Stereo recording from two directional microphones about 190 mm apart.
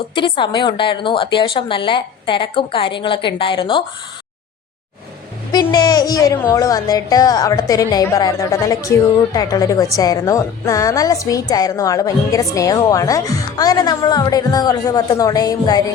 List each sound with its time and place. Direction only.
0.1 s a woman's voice: 25° left (ahead or behind)
5.7 s a woman's voice: 20° left (ahead or behind)